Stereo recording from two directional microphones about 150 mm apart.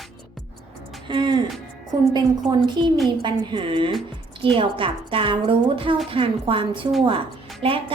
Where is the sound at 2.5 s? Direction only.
30° right (ahead or behind).